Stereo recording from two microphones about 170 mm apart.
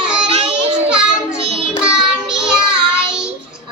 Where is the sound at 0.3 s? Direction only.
35° right (ahead or behind).